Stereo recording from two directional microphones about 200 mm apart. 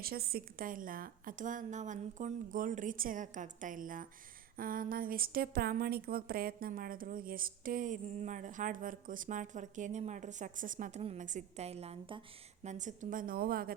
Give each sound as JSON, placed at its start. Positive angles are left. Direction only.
{"t": 0.0, "sound": "a woman's voice", "side_deg": -50}